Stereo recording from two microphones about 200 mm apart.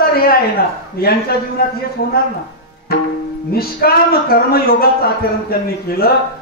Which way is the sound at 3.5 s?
50° left (ahead or behind).